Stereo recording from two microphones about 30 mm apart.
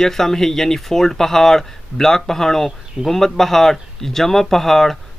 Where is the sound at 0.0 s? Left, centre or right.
Centre.